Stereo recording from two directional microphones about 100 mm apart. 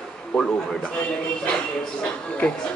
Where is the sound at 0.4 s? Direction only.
10° left (ahead or behind).